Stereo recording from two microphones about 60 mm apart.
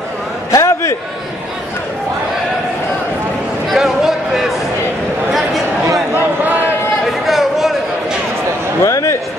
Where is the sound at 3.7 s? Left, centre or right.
Centre.